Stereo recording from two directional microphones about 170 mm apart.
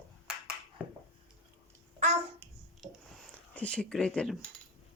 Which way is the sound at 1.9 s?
40° right (ahead or behind).